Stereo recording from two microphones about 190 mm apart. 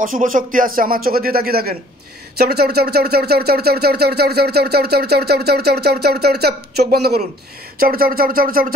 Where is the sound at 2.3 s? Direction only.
55° right (ahead or behind).